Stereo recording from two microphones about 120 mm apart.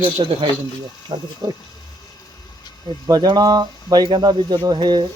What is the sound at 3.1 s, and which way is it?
Speech, 35° right (ahead or behind).